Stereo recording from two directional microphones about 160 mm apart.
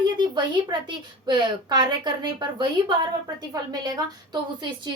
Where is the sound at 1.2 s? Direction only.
30° right (ahead or behind).